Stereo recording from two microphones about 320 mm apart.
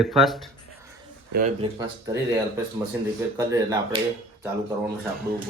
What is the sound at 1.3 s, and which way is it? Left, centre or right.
Speech, right.